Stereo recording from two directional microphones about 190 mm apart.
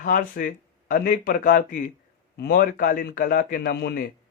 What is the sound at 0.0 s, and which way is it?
A man's voice, 50° left (ahead or behind).